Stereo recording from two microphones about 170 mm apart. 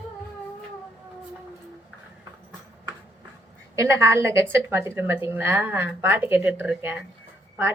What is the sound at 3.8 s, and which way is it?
Speech, 15° right (ahead or behind).